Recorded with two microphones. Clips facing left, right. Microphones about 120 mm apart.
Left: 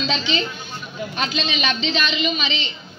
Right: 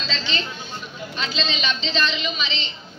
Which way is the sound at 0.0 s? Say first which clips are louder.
Left 6 dB; 15° left (ahead or behind).